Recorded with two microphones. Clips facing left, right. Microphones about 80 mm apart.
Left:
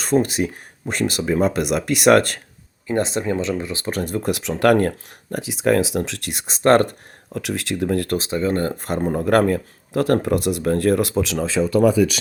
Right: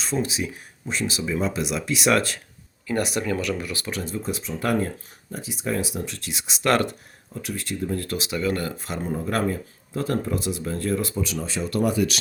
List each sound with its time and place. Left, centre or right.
0.0 s speech: left
2.8 s speech: left
3.9 s speech: left
6.3 s speech: left
7.3 s speech: left
8.1 s speech: left
8.7 s speech: left
9.2 s speech: left